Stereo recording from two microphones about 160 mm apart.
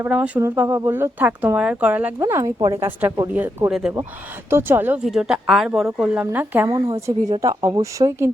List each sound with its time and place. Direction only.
0.0 s speech: 10° right (ahead or behind)
4.4 s speech: 15° right (ahead or behind)
5.0 s speech: centre (ahead or behind)
6.7 s speech: 25° right (ahead or behind)